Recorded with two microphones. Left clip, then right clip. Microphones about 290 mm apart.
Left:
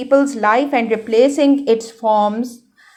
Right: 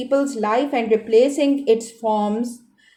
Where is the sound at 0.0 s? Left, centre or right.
Left.